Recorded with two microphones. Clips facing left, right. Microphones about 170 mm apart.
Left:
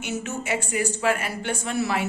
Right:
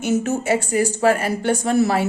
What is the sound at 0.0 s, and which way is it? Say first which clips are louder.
A woman's voice: right 10 dB; 40° right (ahead or behind).